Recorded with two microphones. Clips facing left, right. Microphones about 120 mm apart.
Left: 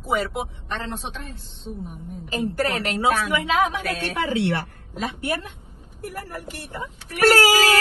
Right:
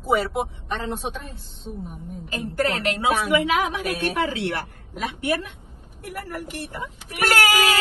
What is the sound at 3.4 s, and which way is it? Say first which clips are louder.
Speech: left 1 dB; 30° left (ahead or behind).